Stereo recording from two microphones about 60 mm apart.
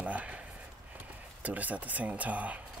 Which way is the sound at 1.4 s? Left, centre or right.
Right.